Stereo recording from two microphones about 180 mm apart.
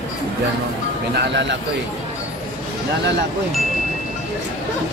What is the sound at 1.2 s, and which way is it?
Speech, 80° right.